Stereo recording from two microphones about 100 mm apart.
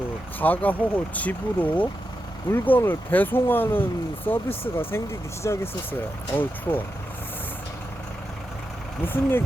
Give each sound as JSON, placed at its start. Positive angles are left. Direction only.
{"t": 0.3, "sound": "speech", "side_deg": 15}